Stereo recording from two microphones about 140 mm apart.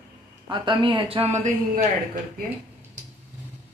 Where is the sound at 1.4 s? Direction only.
70° right (ahead or behind).